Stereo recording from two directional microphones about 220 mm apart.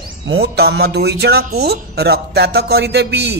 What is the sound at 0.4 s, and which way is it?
Speech, 45° right (ahead or behind).